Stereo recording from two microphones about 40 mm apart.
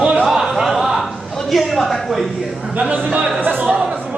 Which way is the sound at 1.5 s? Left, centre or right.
Centre.